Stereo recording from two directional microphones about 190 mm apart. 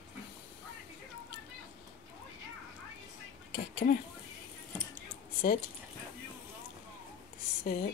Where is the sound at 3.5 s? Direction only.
55° left (ahead or behind).